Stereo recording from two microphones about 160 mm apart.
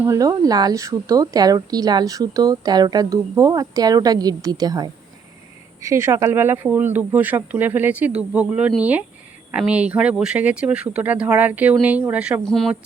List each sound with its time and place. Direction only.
0.0 s speech: 20° right (ahead or behind)
12.5 s speech: centre (ahead or behind)